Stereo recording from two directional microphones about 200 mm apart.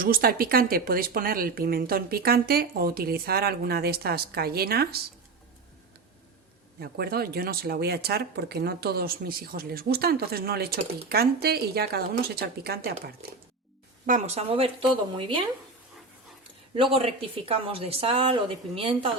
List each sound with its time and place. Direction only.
0.0 s speech: 45° right (ahead or behind)
6.7 s speech: 50° right (ahead or behind)
14.1 s speech: 30° right (ahead or behind)
16.7 s speech: 30° right (ahead or behind)